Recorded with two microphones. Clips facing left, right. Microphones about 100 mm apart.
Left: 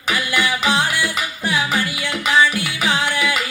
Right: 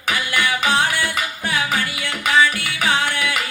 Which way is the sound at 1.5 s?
15° left (ahead or behind).